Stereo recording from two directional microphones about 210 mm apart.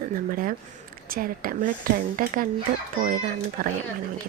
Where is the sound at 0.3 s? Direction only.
40° right (ahead or behind).